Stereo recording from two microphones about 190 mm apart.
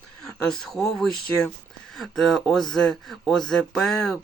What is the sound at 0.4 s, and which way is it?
Speech, centre (ahead or behind).